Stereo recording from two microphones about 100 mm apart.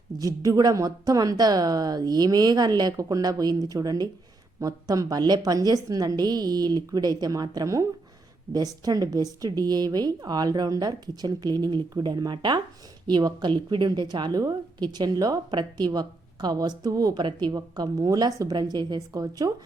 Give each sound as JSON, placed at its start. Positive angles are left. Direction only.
{"t": 0.2, "sound": "a woman's voice", "side_deg": -35}